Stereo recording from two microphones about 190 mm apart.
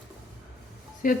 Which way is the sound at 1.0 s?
45° left (ahead or behind).